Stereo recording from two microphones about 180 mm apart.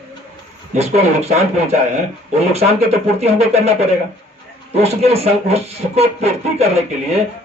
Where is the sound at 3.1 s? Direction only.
35° right (ahead or behind).